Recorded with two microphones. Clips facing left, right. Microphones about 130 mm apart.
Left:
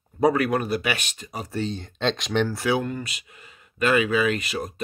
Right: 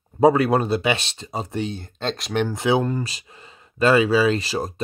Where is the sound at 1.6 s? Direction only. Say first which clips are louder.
Left 5 dB; 10° right (ahead or behind).